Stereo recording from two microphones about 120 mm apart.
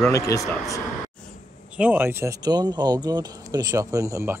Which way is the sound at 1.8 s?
15° right (ahead or behind).